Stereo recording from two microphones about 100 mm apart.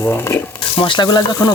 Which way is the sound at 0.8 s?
55° left (ahead or behind).